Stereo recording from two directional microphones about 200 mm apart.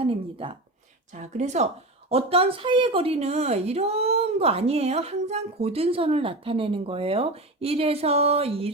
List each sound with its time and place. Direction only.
0.0 s a woman's voice: 30° right (ahead or behind)